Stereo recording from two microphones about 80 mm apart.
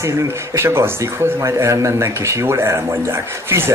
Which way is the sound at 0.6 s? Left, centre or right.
Right.